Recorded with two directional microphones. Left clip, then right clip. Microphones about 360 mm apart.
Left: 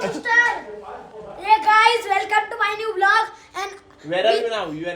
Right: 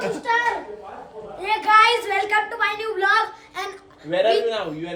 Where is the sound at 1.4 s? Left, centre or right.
Centre.